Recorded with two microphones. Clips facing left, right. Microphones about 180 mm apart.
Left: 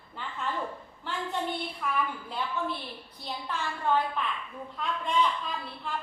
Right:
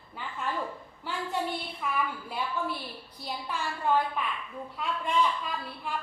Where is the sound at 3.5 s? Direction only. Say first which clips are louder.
Even; 10° right (ahead or behind).